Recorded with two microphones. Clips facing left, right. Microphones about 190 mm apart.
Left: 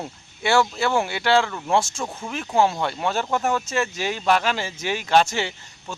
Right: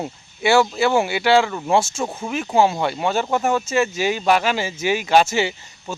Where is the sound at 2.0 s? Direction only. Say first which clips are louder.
Right 5 dB; 20° right (ahead or behind).